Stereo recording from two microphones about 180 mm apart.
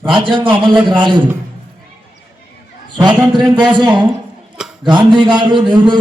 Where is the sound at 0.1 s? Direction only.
25° right (ahead or behind).